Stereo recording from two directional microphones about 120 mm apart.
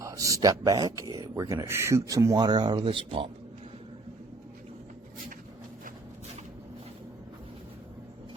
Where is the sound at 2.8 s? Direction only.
50° right (ahead or behind).